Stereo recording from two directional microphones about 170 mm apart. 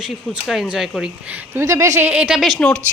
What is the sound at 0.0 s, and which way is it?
Speech, centre (ahead or behind).